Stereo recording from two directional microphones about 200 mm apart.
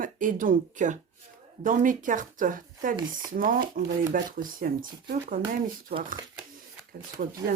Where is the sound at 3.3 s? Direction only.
45° right (ahead or behind).